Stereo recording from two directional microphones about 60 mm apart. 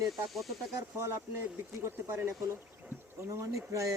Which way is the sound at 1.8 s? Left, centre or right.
Right.